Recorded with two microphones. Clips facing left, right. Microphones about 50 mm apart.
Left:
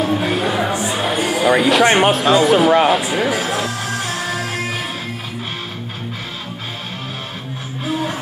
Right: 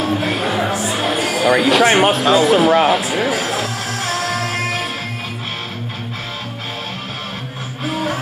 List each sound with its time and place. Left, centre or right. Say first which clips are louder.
0.0 s a sound: left 1 dB; centre
1.6 s speech: right 1 dB; centre
4.3 s music: right 2 dB; right